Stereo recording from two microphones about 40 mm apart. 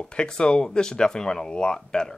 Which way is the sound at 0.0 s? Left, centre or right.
Left.